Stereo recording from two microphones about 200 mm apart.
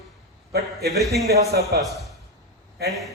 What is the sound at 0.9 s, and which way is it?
A man's voice, centre (ahead or behind).